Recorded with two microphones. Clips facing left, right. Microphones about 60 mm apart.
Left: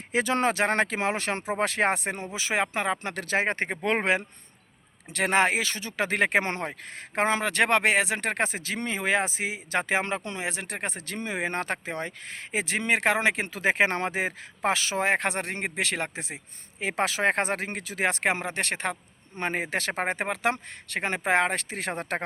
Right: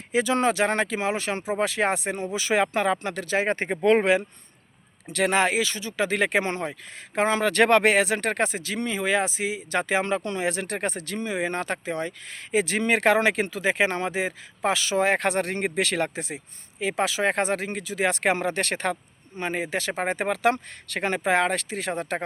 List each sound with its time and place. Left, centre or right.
0.1 s speech: left; by 3.0 s centre
3.0 s speech: left
7.2 s speech: left
8.5 s speech: left
11.0 s speech: left
13.6 s speech: left
16.8 s speech: left
19.4 s speech: left
20.2 s speech: left